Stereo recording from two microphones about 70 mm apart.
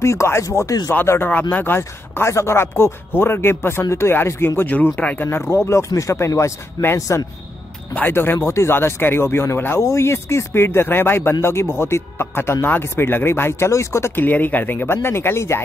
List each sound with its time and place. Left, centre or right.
0.0 s speech: left
1.0 s speech: left
5.5 s speech: left
7.9 s speech: left
8.4 s speech: left
14.2 s speech: left